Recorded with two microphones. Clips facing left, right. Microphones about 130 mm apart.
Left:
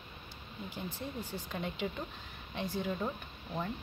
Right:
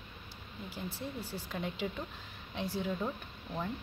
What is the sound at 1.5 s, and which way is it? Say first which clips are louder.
Speech: even; centre (ahead or behind).